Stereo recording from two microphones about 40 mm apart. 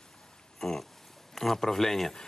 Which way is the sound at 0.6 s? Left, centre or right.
Centre.